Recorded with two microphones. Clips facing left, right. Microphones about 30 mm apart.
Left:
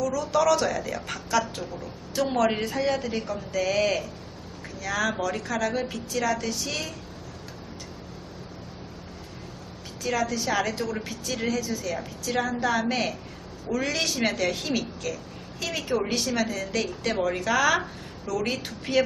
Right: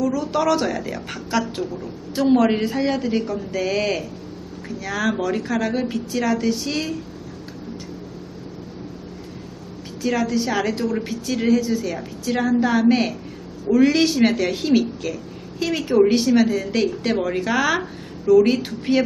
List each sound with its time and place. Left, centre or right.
0.0 s a woman's voice: right
10.2 s a woman's voice: centre
11.0 s a woman's voice: centre
15.7 s a woman's voice: centre
17.1 s a woman's voice: centre